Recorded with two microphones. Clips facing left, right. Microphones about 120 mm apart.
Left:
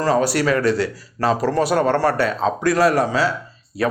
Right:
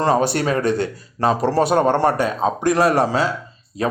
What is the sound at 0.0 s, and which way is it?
A man's voice, 25° right (ahead or behind).